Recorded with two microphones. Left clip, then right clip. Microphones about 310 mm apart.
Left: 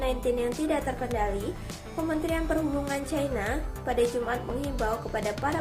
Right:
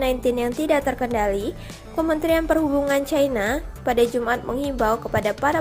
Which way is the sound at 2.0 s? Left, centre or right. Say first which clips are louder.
Right 9 dB; right.